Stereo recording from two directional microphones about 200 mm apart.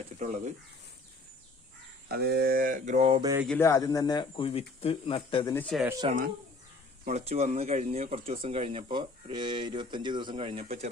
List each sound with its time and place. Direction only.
0.2 s speech: 35° right (ahead or behind)
2.0 s a sound: 50° right (ahead or behind); by 3.2 s 35° right (ahead or behind)
3.2 s speech: 20° right (ahead or behind)
3.4 s speech: 5° left (ahead or behind)
3.7 s speech: 15° left (ahead or behind)
5.5 s speech: 5° left (ahead or behind)
6.1 s speech: 40° right (ahead or behind)